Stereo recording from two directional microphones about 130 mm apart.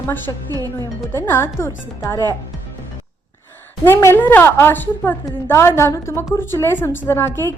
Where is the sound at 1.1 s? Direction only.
20° left (ahead or behind).